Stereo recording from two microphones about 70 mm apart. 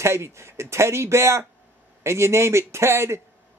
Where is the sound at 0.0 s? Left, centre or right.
Right.